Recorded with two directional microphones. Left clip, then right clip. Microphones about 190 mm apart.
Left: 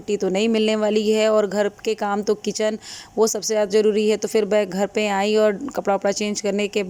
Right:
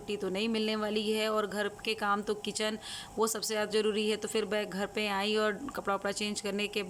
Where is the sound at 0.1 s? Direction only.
35° left (ahead or behind).